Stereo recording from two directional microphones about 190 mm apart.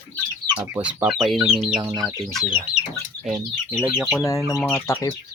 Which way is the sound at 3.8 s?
5° right (ahead or behind).